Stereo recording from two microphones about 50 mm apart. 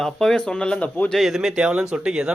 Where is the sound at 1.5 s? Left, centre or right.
Centre.